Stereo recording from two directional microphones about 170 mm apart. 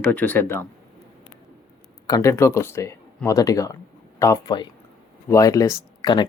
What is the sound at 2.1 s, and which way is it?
Speech, 20° left (ahead or behind).